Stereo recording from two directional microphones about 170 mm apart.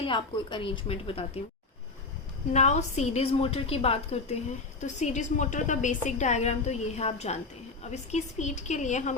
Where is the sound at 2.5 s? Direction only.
40° left (ahead or behind).